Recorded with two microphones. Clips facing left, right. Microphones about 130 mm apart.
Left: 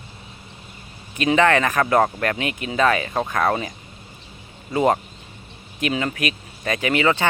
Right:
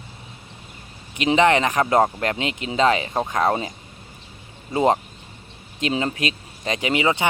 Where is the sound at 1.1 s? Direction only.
20° right (ahead or behind).